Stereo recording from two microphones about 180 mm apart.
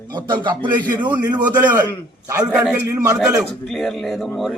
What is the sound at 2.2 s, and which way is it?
Speech, 20° right (ahead or behind).